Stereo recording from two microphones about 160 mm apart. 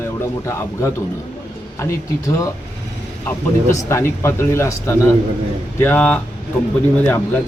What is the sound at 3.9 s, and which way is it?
Speech, 15° left (ahead or behind).